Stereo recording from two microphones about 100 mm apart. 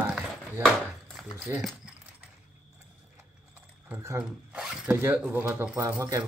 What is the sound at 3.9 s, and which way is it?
Speech, 25° right (ahead or behind).